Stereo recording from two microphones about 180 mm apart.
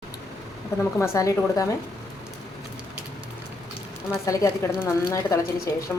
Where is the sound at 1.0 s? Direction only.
20° left (ahead or behind).